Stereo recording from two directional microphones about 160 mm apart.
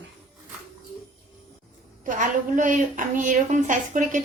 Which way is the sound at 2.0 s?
55° right (ahead or behind).